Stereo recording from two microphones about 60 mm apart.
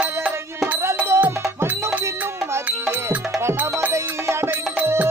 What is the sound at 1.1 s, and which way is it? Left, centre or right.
Music, right.